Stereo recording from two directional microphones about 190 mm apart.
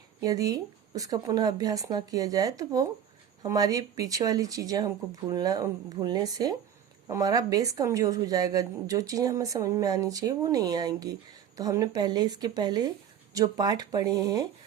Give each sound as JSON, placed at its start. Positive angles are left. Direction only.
{"t": 0.2, "sound": "a woman's voice", "side_deg": -20}